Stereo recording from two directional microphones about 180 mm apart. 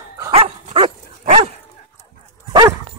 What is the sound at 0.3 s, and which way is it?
Dog, 35° right (ahead or behind).